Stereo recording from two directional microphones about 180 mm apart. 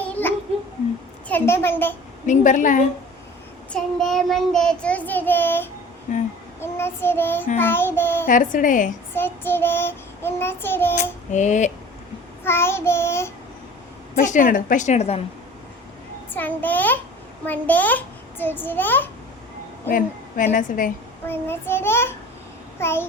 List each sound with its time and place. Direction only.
0.0 s child singing: 10° left (ahead or behind)
2.2 s a woman's voice: 45° left (ahead or behind)
3.7 s child singing: centre (ahead or behind)
8.3 s a woman's voice: 45° left (ahead or behind)
9.1 s child singing: 10° left (ahead or behind)
10.9 s female singing: 40° left (ahead or behind)
12.5 s child singing: 15° left (ahead or behind)
14.2 s a woman's voice: 50° left (ahead or behind)
16.3 s child singing: 10° left (ahead or behind)
19.9 s a woman's voice: 50° left (ahead or behind)
21.2 s child singing: 10° left (ahead or behind)